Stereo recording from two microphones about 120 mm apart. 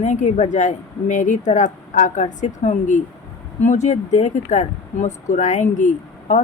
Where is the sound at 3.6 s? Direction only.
75° left (ahead or behind).